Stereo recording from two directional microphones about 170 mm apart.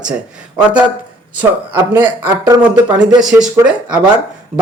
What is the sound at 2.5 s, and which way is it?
Speech, 20° right (ahead or behind).